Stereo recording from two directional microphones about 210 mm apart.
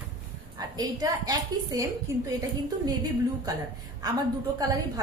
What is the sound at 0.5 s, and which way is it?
A woman's voice, 20° right (ahead or behind).